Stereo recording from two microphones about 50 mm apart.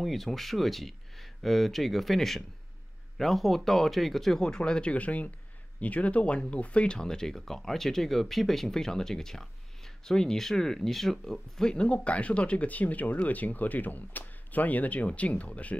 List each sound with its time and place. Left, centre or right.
0.0 s speech: centre
11.7 s speech: left